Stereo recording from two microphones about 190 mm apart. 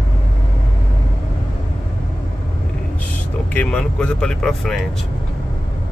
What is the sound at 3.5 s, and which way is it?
Speech, 5° left (ahead or behind).